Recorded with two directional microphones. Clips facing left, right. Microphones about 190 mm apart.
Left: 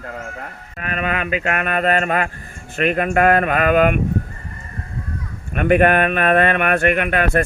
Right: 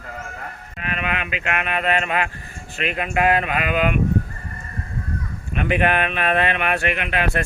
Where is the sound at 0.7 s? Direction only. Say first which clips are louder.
Left 4 dB; 45° left (ahead or behind).